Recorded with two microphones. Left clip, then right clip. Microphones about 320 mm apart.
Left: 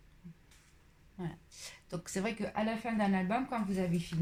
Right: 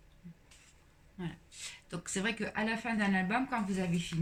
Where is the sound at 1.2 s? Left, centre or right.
Centre.